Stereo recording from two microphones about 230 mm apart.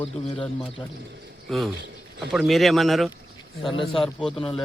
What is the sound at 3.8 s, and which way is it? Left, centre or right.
Speech, left.